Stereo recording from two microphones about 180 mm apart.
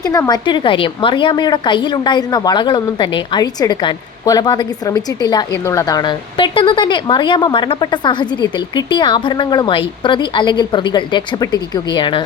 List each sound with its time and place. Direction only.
0.0 s a woman's voice: 20° left (ahead or behind)